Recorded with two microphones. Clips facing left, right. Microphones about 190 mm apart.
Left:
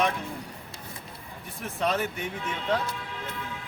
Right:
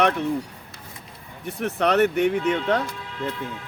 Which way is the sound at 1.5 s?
70° right (ahead or behind).